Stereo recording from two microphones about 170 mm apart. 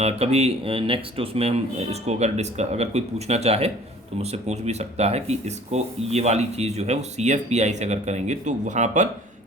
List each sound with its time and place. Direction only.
0.0 s speech: 40° right (ahead or behind)